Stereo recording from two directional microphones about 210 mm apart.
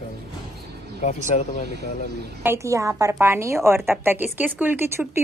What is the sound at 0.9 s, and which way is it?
Speech, 35° left (ahead or behind).